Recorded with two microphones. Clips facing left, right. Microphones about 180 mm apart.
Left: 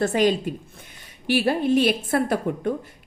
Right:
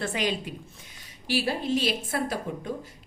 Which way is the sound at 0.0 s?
45° left (ahead or behind).